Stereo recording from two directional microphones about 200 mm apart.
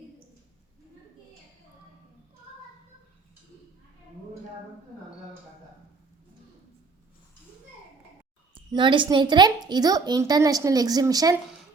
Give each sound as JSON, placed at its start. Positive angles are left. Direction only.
{"t": 8.7, "sound": "speech", "side_deg": -25}